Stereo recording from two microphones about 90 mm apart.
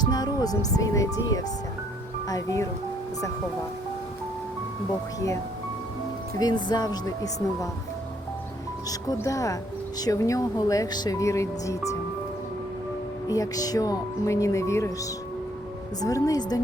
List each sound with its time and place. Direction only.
0.0 s speech: 50° left (ahead or behind)
6.4 s speech: 50° left (ahead or behind)
9.2 s speech: 40° left (ahead or behind)
13.2 s speech: 40° left (ahead or behind)
16.0 s speech: 40° left (ahead or behind)